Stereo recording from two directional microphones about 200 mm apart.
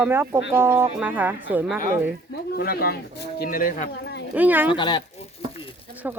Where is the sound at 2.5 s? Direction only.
50° left (ahead or behind).